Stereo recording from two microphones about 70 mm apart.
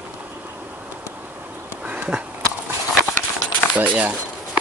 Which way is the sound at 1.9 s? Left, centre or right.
Centre.